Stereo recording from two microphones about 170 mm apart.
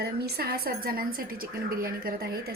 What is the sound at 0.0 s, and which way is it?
A woman's voice, 70° right (ahead or behind).